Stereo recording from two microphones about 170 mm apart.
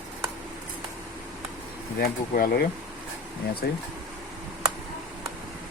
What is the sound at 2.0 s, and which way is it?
Speech, 65° left (ahead or behind).